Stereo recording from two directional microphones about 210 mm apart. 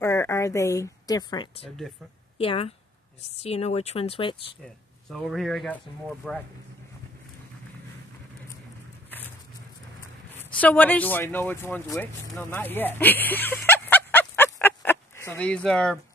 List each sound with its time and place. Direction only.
0.0 s speech: 15° left (ahead or behind)
5.1 s speech: centre (ahead or behind)
10.3 s speech: 5° left (ahead or behind)
11.9 s a sound: 5° left (ahead or behind)